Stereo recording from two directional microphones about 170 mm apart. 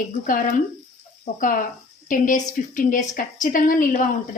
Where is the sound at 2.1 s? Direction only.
45° left (ahead or behind).